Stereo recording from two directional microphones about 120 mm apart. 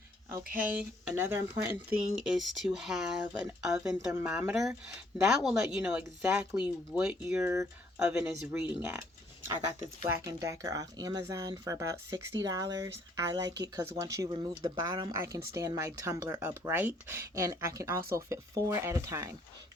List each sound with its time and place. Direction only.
0.3 s speech: 15° right (ahead or behind)
2.1 s speech: 5° right (ahead or behind)
6.0 s speech: 20° right (ahead or behind)
7.4 s speech: 25° right (ahead or behind)
7.9 s speech: 5° right (ahead or behind)
8.8 s speech: 20° right (ahead or behind)
10.1 s speech: 25° right (ahead or behind)
14.3 s speech: 35° right (ahead or behind)